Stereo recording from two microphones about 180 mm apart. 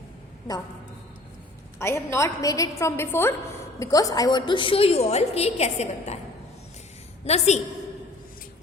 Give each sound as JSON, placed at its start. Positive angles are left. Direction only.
{"t": 1.8, "sound": "a woman's voice", "side_deg": 15}
{"t": 7.3, "sound": "a woman's voice", "side_deg": 35}